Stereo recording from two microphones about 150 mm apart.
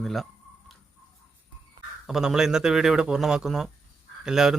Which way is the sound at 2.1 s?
5° right (ahead or behind).